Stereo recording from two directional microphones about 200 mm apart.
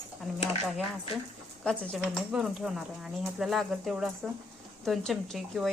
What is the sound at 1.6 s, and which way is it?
A woman's voice, centre (ahead or behind).